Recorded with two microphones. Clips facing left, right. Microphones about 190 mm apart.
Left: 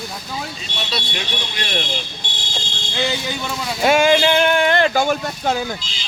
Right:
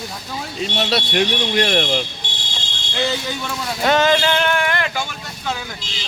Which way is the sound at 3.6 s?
10° left (ahead or behind).